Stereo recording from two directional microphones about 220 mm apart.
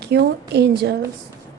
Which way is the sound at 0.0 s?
50° right (ahead or behind).